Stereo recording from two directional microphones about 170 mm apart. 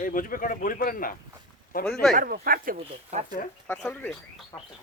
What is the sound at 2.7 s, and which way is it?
Speech, 40° right (ahead or behind).